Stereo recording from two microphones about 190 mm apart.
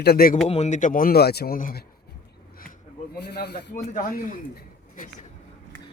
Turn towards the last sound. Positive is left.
turn(degrees=45)  # may be behind; listen again after turning